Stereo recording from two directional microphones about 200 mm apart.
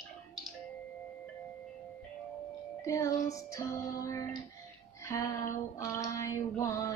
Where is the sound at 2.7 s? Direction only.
15° left (ahead or behind).